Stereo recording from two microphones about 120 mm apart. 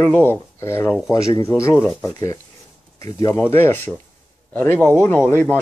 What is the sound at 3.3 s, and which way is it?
Speech, 20° left (ahead or behind).